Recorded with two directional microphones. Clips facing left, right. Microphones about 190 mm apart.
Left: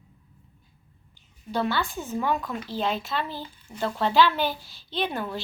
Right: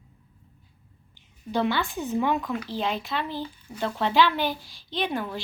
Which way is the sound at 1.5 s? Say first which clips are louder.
Right 1 dB; 15° right (ahead or behind).